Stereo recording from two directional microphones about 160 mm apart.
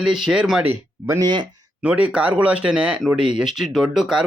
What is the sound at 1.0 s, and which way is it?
Speech, 15° right (ahead or behind).